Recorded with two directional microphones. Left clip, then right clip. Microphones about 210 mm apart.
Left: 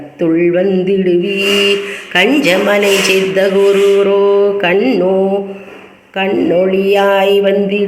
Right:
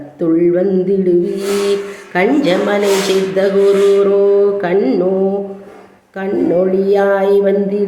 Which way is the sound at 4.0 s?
5° left (ahead or behind).